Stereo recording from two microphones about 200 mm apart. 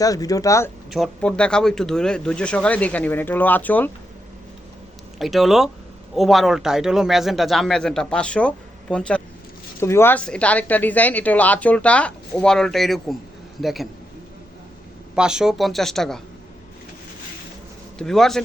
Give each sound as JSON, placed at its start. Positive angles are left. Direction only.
{"t": 0.0, "sound": "a woman's voice", "side_deg": 15}
{"t": 0.9, "sound": "speech", "side_deg": 0}
{"t": 5.2, "sound": "a woman's voice", "side_deg": 0}
{"t": 15.1, "sound": "speech", "side_deg": -5}
{"t": 17.9, "sound": "speech", "side_deg": 0}